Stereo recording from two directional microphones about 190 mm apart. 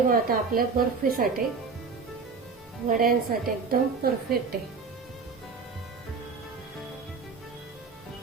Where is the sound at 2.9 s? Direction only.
50° right (ahead or behind).